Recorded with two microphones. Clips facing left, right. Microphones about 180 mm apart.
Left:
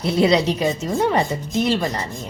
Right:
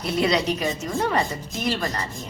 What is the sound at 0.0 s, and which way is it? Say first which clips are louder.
Speech: left 5 dB; 30° left (ahead or behind).